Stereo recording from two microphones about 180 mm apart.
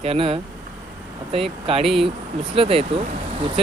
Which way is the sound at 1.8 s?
Centre (ahead or behind).